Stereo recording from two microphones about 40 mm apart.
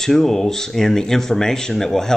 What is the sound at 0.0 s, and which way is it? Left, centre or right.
Speech, centre.